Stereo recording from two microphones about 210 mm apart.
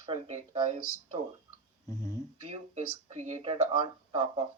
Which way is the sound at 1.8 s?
15° left (ahead or behind).